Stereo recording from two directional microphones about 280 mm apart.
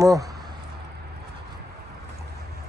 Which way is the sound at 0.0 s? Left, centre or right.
Centre.